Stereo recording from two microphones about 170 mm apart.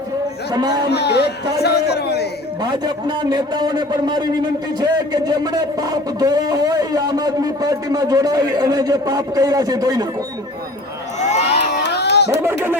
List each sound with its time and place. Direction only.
0.5 s speech: 25° right (ahead or behind)
0.9 s a man's voice: 75° left (ahead or behind)
2.6 s speech: 25° right (ahead or behind)
11.2 s a sound: 40° left (ahead or behind)
11.8 s crowd: 85° left
12.4 s speech: 15° right (ahead or behind)